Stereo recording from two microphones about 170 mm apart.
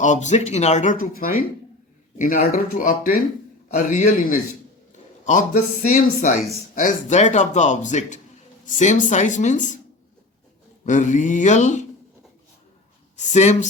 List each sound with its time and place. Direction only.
0.0 s speech: 45° left (ahead or behind)
10.8 s speech: 45° left (ahead or behind)
13.1 s speech: 45° left (ahead or behind)